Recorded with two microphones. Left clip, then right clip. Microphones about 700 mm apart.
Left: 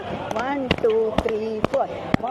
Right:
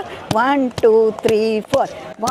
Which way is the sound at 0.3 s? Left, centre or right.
Right.